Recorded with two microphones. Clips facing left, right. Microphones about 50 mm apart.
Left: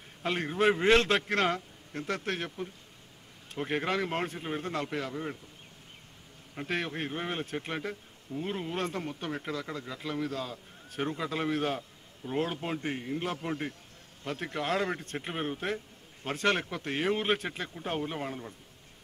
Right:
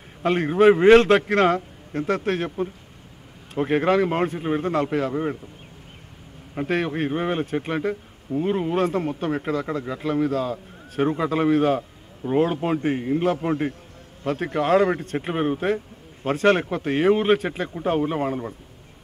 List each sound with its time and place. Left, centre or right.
0.2 s speech: centre
3.5 s speech: centre
6.7 s speech: centre